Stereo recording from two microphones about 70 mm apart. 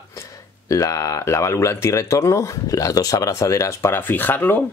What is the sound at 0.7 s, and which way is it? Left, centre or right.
Speech, left.